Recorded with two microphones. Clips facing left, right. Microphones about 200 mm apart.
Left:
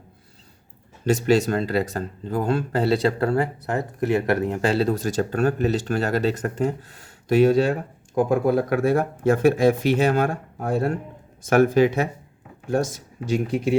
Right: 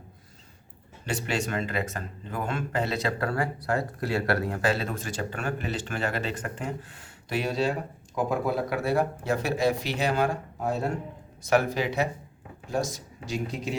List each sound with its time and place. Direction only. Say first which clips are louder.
1.0 s speech: left 11 dB; 40° left (ahead or behind); by 13.7 s 55° left (ahead or behind)